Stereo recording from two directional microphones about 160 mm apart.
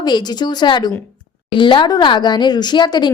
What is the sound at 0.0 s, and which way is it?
A woman's voice, 25° left (ahead or behind).